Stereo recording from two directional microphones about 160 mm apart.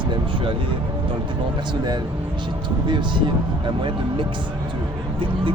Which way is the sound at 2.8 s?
30° right (ahead or behind).